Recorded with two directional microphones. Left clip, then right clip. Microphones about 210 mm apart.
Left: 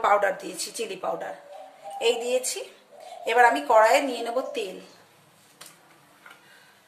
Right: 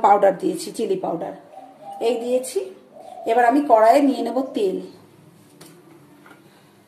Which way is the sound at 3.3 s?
25° left (ahead or behind).